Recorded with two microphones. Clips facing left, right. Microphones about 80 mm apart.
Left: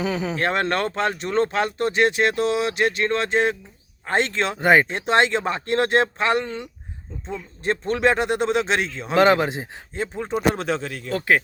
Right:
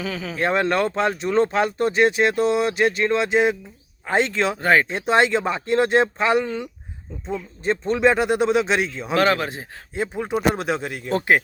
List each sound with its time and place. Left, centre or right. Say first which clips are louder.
0.0 s speech: left 4 dB; left
0.3 s speech: right 5 dB; centre
4.6 s speech: left 2 dB; centre
4.9 s speech: right 1 dB; centre
9.1 s speech: left 3 dB; left
9.9 s a man's voice: right 2 dB; centre